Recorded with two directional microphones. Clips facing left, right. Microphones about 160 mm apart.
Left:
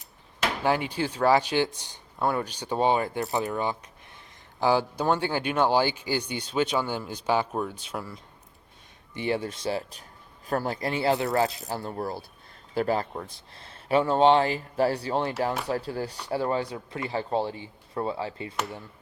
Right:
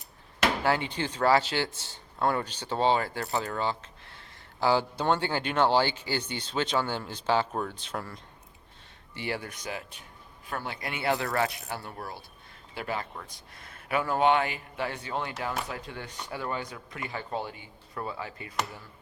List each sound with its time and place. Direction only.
0.6 s speech: 15° left (ahead or behind)
9.1 s speech: 20° left (ahead or behind)